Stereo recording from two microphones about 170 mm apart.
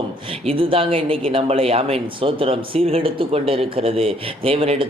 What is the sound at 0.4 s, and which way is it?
A man's voice, 30° right (ahead or behind).